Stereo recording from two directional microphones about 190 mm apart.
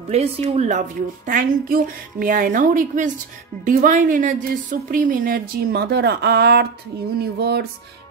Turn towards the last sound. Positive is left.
turn(degrees=-60)  # may be behind; listen again after turning